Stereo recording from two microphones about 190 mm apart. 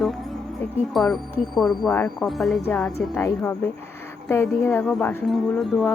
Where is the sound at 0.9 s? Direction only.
Centre (ahead or behind).